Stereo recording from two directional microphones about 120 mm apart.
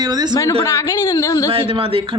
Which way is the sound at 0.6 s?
25° left (ahead or behind).